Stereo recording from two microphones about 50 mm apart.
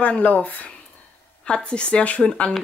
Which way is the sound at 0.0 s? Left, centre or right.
Left.